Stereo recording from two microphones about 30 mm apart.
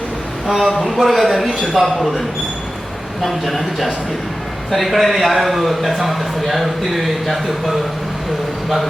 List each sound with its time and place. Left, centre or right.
0.4 s a man's voice: centre
3.2 s a man's voice: centre